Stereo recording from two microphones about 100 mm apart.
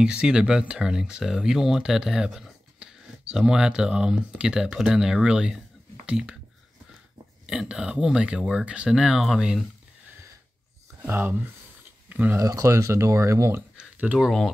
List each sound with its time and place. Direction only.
0.0 s speech: 10° right (ahead or behind)
7.4 s speech: 5° right (ahead or behind)
11.0 s speech: 20° right (ahead or behind)
12.4 s speech: 35° right (ahead or behind)
13.7 s a sound: 15° right (ahead or behind)
14.2 s speech: centre (ahead or behind)